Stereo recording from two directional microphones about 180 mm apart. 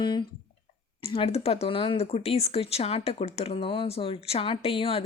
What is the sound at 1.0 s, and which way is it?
Speech, 30° left (ahead or behind).